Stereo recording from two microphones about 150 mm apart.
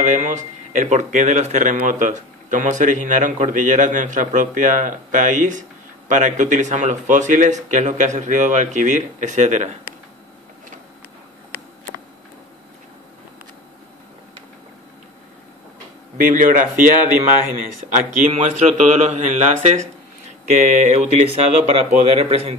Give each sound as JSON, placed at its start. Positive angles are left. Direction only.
{"t": 0.0, "sound": "speech", "side_deg": -55}
{"t": 16.2, "sound": "speech", "side_deg": -60}
{"t": 18.3, "sound": "speech", "side_deg": -50}